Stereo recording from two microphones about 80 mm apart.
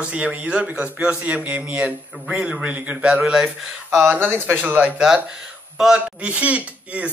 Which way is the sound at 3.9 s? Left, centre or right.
Right.